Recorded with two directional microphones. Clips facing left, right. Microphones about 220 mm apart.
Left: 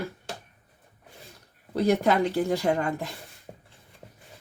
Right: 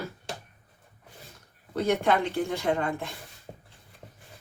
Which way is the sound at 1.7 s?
40° left (ahead or behind).